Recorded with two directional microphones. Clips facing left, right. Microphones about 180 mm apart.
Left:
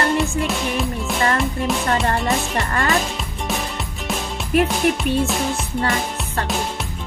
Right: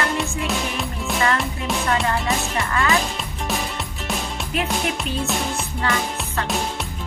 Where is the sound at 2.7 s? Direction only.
45° left (ahead or behind).